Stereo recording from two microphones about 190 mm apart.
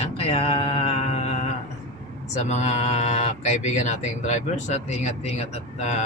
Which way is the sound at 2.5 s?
40° left (ahead or behind).